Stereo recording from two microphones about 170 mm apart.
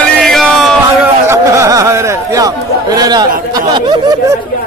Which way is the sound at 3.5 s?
25° right (ahead or behind).